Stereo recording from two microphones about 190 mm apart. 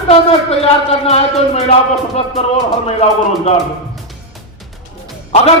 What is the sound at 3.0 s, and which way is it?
Speech, 35° left (ahead or behind).